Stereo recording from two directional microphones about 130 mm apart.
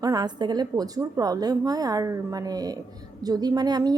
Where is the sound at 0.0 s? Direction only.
30° right (ahead or behind).